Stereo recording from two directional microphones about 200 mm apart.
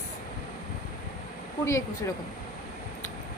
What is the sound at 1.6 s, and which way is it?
Speech, 15° left (ahead or behind).